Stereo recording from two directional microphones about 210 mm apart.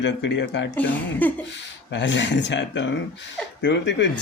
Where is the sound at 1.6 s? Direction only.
60° left (ahead or behind).